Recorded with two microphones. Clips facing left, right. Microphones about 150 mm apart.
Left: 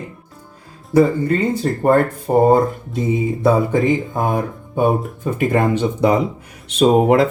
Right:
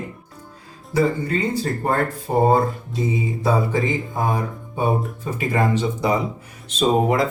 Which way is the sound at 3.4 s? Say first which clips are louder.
Left 5 dB; 60° left (ahead or behind).